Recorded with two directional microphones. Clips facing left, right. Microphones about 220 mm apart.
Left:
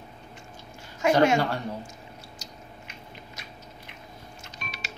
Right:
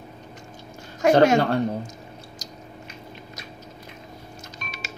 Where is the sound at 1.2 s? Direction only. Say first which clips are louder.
Right 3 dB; 40° right (ahead or behind).